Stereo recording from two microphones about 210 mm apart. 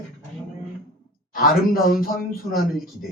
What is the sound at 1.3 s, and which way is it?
Speech, 40° left (ahead or behind).